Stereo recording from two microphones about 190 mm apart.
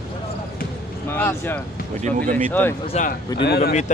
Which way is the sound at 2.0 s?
40° right (ahead or behind).